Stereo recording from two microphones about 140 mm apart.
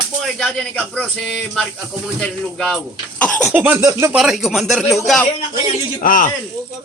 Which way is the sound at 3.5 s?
10° right (ahead or behind).